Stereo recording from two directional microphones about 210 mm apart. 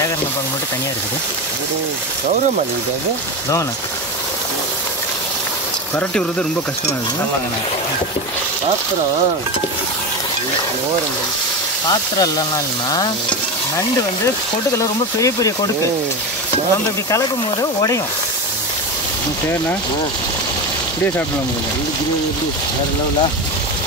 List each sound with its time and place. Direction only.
11.9 s speech: 20° left (ahead or behind)
12.9 s stir: 20° left (ahead or behind)
14.8 s speech: 15° left (ahead or behind)
17.1 s speech: 15° left (ahead or behind)